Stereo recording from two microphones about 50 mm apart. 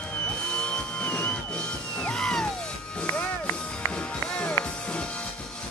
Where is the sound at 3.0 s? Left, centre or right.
Left.